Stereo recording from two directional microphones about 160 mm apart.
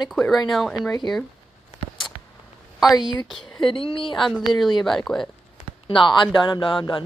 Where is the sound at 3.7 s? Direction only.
35° left (ahead or behind).